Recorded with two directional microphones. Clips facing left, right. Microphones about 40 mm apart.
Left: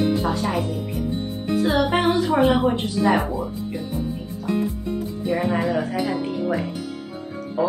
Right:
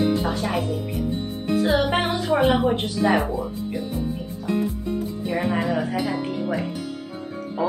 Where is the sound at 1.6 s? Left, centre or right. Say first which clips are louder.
Even; right.